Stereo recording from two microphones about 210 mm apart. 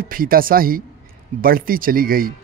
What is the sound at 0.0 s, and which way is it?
Speech, 45° right (ahead or behind).